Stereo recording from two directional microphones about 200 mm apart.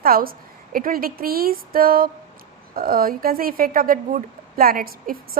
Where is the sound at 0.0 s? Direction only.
45° right (ahead or behind).